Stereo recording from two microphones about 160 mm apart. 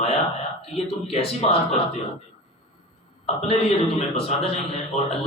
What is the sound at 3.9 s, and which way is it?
A man's voice, 40° left (ahead or behind).